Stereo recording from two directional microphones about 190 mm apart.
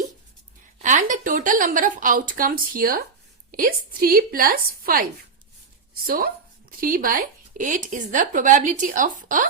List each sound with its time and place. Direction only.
0.8 s speech: 40° right (ahead or behind)